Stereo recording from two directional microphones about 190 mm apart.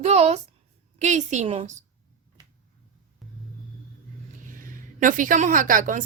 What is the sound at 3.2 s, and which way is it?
Rumble, centre (ahead or behind).